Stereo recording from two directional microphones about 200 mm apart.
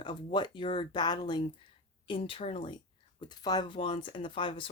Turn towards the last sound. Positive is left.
turn(degrees=25)  # may be behind; listen again after turning